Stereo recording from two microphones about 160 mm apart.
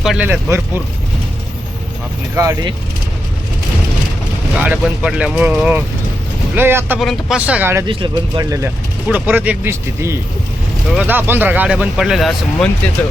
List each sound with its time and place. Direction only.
0.0 s speech: centre (ahead or behind)
0.3 s speech: 15° right (ahead or behind)
2.3 s speech: 20° right (ahead or behind)
4.5 s speech: 10° right (ahead or behind)
7.0 s speech: centre (ahead or behind)
7.9 s speech: 30° right (ahead or behind); by 12.6 s centre (ahead or behind)